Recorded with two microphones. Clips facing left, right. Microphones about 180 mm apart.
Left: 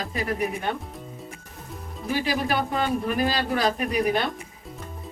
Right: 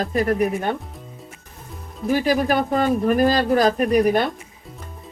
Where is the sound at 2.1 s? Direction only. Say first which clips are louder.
Right 6 dB; 45° right (ahead or behind).